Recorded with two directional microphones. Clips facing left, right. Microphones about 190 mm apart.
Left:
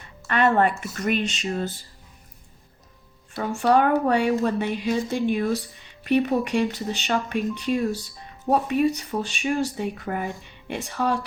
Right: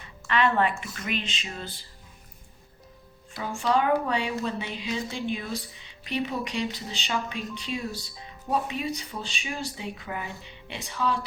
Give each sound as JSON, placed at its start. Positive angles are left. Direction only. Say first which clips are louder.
{"t": 0.3, "sound": "speech", "louder": "left 4 dB", "side_deg": 45}
{"t": 3.6, "sound": "speech", "louder": "left 5 dB", "side_deg": 55}